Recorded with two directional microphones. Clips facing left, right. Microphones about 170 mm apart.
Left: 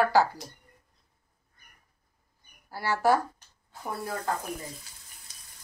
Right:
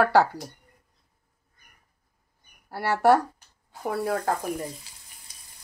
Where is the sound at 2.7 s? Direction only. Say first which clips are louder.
Right 4 dB; 65° right (ahead or behind).